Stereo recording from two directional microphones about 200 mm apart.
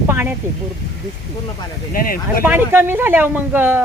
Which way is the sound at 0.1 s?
10° right (ahead or behind).